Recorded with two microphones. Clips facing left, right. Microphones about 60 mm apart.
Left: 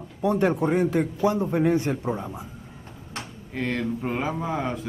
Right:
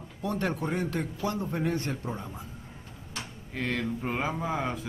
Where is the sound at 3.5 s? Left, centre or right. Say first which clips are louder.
Left 4 dB; centre.